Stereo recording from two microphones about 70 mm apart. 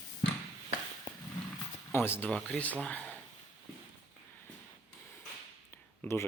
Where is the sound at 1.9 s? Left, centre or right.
Left.